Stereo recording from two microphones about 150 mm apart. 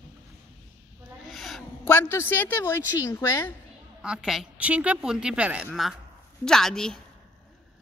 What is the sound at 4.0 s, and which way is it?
A woman's voice, 5° right (ahead or behind).